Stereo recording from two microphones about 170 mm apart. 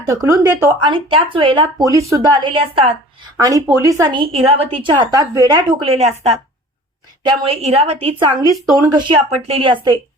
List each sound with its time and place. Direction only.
0.1 s speech: 15° right (ahead or behind)
0.8 s a woman's voice: 30° right (ahead or behind)
1.8 s a woman's voice: 20° right (ahead or behind)
3.3 s a woman's voice: 20° right (ahead or behind)
4.2 s a woman's voice: 35° right (ahead or behind)
5.8 s a woman's voice: 35° right (ahead or behind)